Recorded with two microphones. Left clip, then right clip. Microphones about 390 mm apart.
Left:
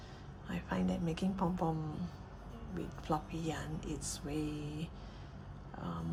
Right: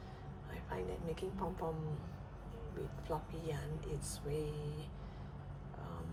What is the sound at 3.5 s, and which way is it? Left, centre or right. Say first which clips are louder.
Speech: left 3 dB; centre.